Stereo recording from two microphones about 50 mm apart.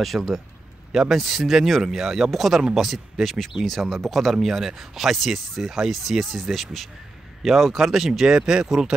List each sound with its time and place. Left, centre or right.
0.1 s speech: centre
1.1 s speech: centre